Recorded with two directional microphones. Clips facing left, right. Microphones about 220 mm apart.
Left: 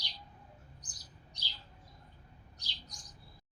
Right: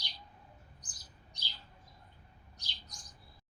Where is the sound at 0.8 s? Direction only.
50° right (ahead or behind).